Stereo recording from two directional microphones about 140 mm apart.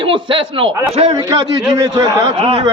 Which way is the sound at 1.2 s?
30° right (ahead or behind).